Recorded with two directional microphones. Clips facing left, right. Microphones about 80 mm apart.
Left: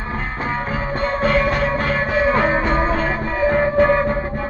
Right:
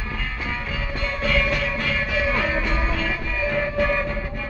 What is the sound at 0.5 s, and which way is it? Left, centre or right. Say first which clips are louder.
Music: left 9 dB; left.